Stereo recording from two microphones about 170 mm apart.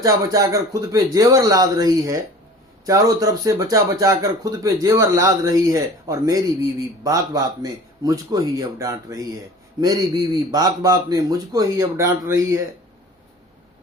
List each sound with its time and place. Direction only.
0.0 s speech: 20° right (ahead or behind)